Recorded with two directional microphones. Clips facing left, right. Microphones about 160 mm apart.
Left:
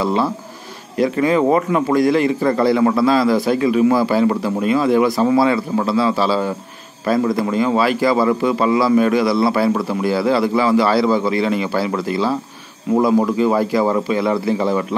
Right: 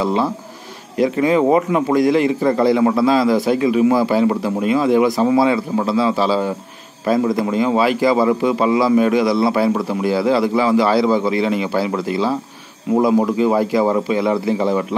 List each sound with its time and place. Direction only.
0.0 s a man's voice: 15° right (ahead or behind)